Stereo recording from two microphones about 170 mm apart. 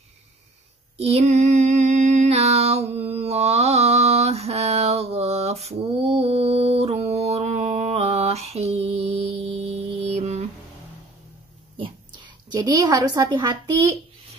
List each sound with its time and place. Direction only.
0.9 s female singing: 40° right (ahead or behind)
12.4 s a woman's voice: 20° right (ahead or behind)